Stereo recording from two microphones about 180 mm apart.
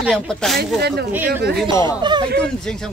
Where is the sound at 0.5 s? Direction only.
65° right (ahead or behind).